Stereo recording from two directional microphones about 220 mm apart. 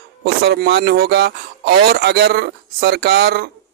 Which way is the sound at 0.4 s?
45° right (ahead or behind).